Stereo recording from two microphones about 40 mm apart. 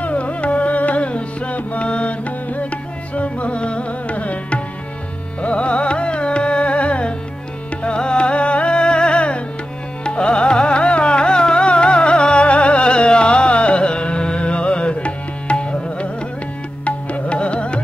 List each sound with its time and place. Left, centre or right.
0.0 s carnatic music: left
5.4 s music: left